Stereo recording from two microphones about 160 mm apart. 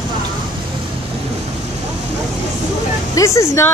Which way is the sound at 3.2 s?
20° left (ahead or behind).